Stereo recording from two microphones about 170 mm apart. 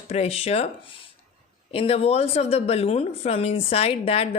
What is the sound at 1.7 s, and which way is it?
Speech, 35° left (ahead or behind).